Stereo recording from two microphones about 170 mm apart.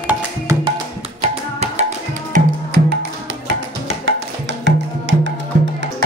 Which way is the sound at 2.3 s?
65° right (ahead or behind).